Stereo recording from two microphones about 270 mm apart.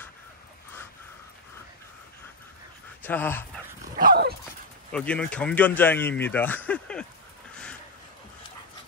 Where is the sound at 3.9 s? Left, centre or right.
Right.